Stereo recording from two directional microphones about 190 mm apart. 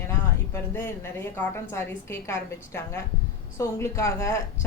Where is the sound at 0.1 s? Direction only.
15° left (ahead or behind).